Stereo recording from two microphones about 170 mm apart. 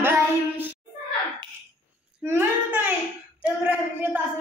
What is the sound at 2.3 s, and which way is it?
A woman's voice, 15° right (ahead or behind).